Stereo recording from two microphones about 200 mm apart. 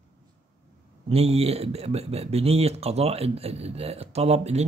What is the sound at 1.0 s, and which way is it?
Speech, 30° right (ahead or behind).